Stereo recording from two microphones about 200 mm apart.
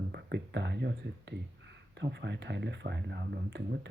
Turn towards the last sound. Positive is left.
turn(degrees=-55)  # may be behind; listen again after turning